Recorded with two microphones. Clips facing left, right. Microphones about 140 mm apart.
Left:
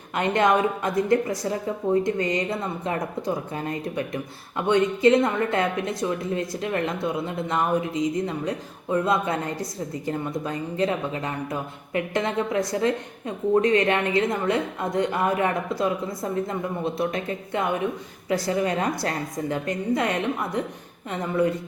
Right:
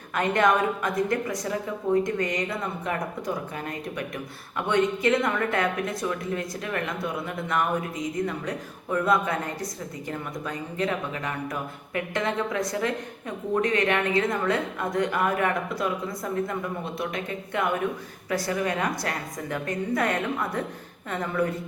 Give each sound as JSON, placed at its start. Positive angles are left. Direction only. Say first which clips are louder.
{"t": 0.1, "sound": "a woman's voice", "louder": "left 1 dB", "side_deg": 25}